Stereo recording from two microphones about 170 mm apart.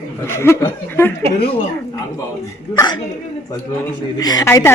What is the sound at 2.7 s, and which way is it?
Speech, 25° left (ahead or behind).